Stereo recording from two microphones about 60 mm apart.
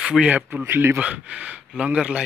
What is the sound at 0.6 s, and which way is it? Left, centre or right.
Speech, right.